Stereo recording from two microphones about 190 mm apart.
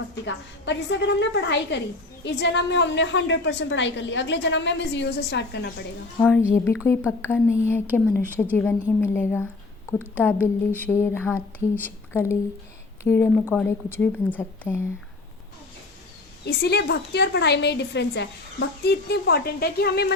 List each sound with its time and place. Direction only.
0.3 s a woman's voice: 70° left (ahead or behind)
6.1 s speech: 5° left (ahead or behind)
16.5 s a woman's voice: 60° left (ahead or behind)